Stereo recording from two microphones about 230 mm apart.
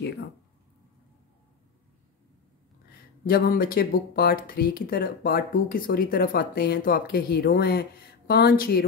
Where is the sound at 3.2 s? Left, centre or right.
Left.